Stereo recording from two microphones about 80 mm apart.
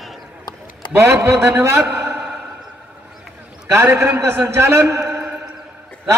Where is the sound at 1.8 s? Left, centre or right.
Centre.